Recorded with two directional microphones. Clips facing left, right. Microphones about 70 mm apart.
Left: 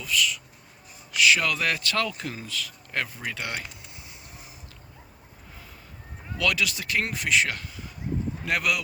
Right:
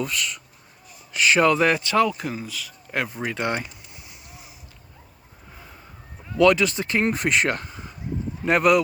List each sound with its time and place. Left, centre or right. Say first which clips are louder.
0.0 s speech: even; right
6.3 s speech: right 9 dB; right